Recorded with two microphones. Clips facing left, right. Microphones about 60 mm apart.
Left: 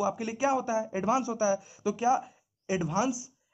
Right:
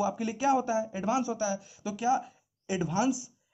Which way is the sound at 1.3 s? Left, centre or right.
Left.